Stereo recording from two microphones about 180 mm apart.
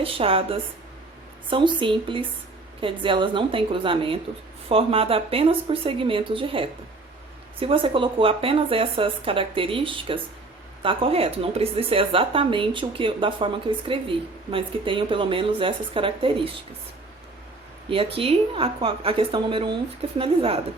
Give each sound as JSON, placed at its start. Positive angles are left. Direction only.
{"t": 0.0, "sound": "a woman's voice", "side_deg": -30}
{"t": 17.8, "sound": "a woman's voice", "side_deg": -30}